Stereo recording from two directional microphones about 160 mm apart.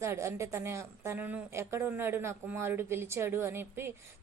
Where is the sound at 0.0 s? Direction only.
15° right (ahead or behind).